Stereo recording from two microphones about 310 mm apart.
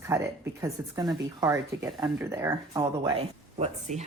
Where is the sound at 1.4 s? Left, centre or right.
Centre.